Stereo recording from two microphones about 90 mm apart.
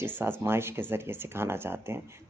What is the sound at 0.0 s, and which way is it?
Speech, 25° right (ahead or behind).